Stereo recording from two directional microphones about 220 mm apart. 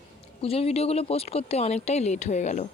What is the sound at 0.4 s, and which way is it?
Speech, 25° left (ahead or behind).